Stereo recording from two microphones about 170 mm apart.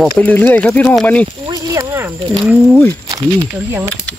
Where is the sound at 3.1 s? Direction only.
20° right (ahead or behind).